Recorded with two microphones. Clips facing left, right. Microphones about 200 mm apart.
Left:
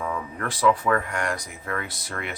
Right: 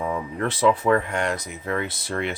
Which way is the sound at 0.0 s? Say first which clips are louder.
Right 4 dB; 20° right (ahead or behind).